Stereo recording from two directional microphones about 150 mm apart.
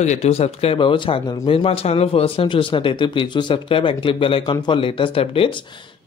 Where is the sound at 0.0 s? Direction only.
50° left (ahead or behind).